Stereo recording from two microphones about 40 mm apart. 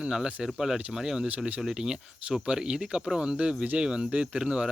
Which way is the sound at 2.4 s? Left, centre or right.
Right.